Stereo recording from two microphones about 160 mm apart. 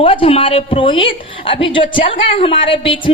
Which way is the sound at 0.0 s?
35° left (ahead or behind).